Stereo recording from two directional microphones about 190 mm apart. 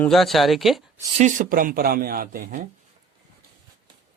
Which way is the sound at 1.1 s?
40° right (ahead or behind).